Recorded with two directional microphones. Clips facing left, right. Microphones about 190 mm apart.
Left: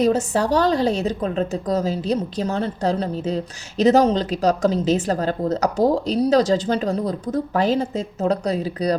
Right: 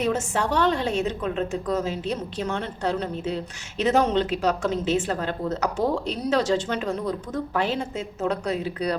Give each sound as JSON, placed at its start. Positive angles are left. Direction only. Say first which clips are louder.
{"t": 0.0, "sound": "a woman's voice", "louder": "left 6 dB", "side_deg": 35}